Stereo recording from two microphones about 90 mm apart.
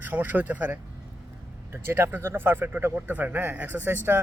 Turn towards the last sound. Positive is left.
turn(degrees=-20)  # may be behind; listen again after turning